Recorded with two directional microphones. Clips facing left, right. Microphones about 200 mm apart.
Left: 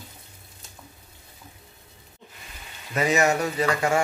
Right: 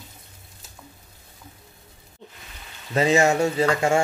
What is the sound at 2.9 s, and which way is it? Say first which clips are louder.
Speech: right 3 dB; 25° right (ahead or behind).